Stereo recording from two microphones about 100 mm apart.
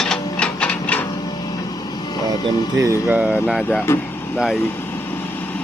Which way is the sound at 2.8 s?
30° right (ahead or behind).